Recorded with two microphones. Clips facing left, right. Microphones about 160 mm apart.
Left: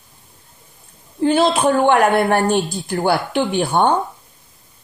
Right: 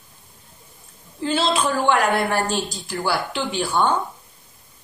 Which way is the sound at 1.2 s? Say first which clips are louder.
Left 6 dB; 55° left (ahead or behind).